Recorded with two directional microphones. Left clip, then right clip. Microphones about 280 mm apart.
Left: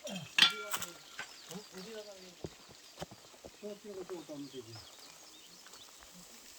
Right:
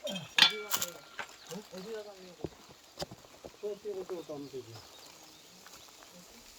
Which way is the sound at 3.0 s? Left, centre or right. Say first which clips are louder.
Right 6 dB; right.